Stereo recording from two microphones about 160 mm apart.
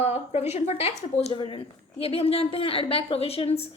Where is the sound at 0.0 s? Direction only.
40° left (ahead or behind).